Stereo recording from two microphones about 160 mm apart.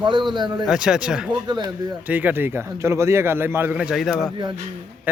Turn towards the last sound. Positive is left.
turn(degrees=0)  # may be behind; listen again after turning